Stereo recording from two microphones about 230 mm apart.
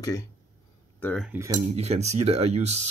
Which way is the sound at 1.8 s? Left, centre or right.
Right.